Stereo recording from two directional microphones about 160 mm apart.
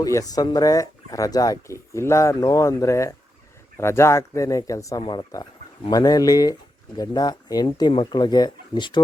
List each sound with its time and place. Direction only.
0.0 s speech: 20° left (ahead or behind)